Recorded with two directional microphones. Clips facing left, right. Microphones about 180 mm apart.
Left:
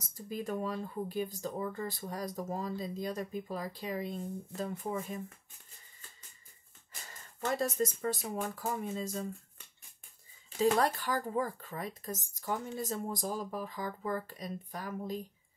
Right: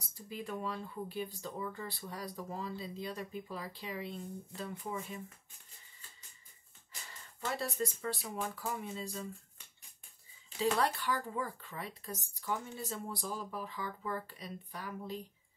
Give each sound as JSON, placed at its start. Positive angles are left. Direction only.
{"t": 0.0, "sound": "speech", "side_deg": 45}
{"t": 6.9, "sound": "speech", "side_deg": 45}
{"t": 10.6, "sound": "speech", "side_deg": 45}